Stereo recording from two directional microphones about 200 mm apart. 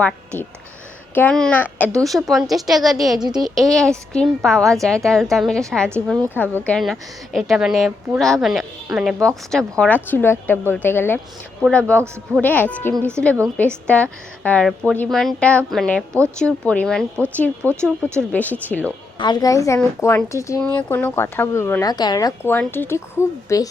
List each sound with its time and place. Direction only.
0.0 s a woman's voice: 5° left (ahead or behind)
19.2 s speech: 20° left (ahead or behind)